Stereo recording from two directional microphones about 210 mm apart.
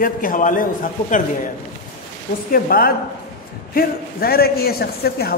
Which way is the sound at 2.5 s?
45° left (ahead or behind).